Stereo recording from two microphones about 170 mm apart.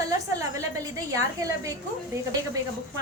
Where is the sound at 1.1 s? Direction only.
20° right (ahead or behind).